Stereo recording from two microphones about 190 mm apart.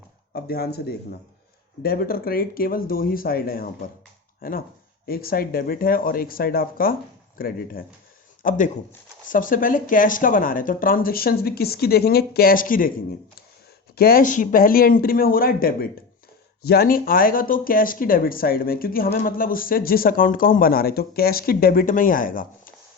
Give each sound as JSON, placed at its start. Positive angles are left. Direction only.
{"t": 0.3, "sound": "speech", "side_deg": 55}
{"t": 13.9, "sound": "speech", "side_deg": 50}